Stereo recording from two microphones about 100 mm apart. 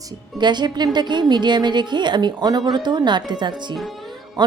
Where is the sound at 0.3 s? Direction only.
50° right (ahead or behind).